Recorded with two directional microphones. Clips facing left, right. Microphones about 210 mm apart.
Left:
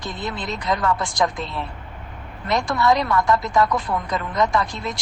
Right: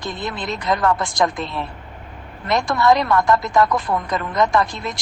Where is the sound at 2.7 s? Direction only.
45° right (ahead or behind).